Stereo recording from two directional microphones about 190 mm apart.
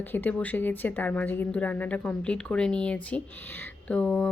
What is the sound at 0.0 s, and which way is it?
Speech, 10° left (ahead or behind).